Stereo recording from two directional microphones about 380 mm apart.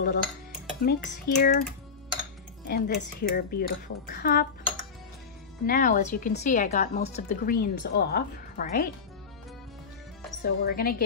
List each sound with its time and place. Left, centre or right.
0.0 s cutlery: left
2.6 s a woman's voice: left
10.4 s a woman's voice: left